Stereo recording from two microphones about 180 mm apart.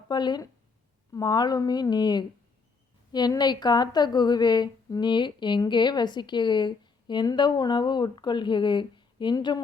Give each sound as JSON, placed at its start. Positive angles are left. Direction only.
{"t": 0.1, "sound": "a woman's voice", "side_deg": 25}